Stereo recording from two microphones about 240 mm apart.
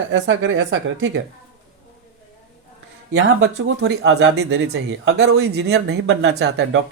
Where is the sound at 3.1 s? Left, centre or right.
Right.